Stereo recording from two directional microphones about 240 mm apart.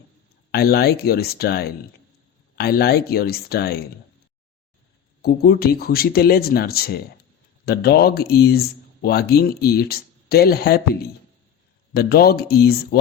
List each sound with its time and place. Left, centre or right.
0.5 s a man's voice: left
5.2 s a man's voice: left